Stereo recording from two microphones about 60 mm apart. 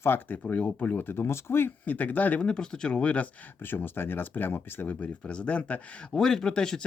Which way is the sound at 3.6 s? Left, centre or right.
Left.